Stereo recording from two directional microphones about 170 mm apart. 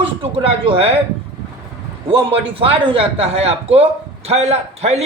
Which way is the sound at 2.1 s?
35° right (ahead or behind).